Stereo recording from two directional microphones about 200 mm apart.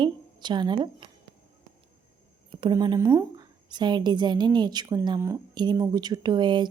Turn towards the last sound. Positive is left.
turn(degrees=-25)  # may be behind; listen again after turning